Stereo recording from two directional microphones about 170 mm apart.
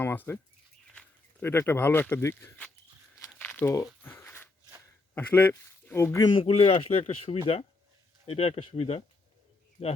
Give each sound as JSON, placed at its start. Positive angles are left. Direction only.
{"t": 0.0, "sound": "speech", "side_deg": 15}
{"t": 3.3, "sound": "crumpling", "side_deg": 10}
{"t": 4.0, "sound": "a sound", "side_deg": 10}
{"t": 5.1, "sound": "speech", "side_deg": 10}
{"t": 6.2, "sound": "speech", "side_deg": 30}